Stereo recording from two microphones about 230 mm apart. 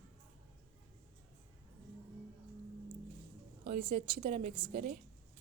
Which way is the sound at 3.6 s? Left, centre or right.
Right.